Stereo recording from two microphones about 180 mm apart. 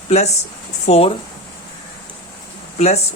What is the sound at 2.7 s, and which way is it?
Speech, 35° left (ahead or behind).